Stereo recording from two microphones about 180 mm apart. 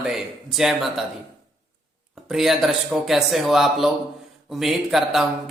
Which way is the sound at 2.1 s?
Centre (ahead or behind).